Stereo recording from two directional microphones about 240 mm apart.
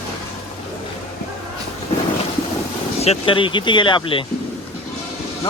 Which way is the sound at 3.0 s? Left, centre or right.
Left.